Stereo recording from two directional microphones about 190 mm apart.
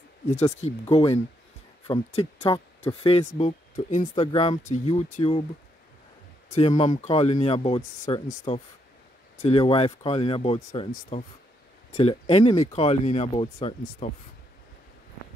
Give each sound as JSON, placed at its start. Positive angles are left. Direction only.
{"t": 0.4, "sound": "speech", "side_deg": 35}
{"t": 4.1, "sound": "speech", "side_deg": 30}
{"t": 6.5, "sound": "speech", "side_deg": 30}